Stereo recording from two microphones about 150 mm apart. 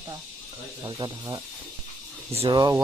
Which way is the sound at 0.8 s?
30° right (ahead or behind).